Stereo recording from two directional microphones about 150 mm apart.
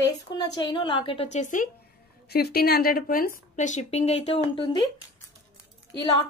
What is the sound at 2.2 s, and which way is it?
A woman's voice, 90° left.